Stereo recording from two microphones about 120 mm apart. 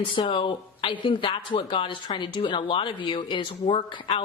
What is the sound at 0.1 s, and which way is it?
A woman's voice, 45° left (ahead or behind).